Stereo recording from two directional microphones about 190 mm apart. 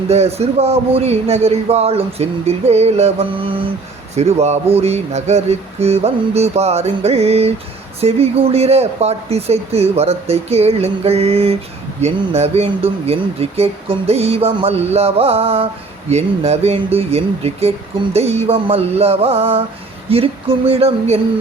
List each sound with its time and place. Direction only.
0.1 s a man's voice: 35° right (ahead or behind)